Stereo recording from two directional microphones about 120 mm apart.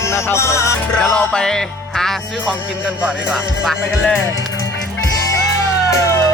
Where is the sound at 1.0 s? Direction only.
5° left (ahead or behind).